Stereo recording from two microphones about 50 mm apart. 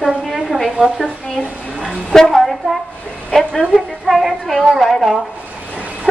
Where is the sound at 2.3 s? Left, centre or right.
Centre.